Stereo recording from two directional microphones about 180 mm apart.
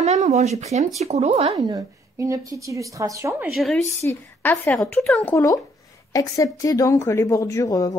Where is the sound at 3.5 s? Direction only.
Centre (ahead or behind).